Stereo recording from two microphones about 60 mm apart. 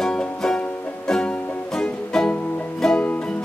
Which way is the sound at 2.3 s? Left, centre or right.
Left.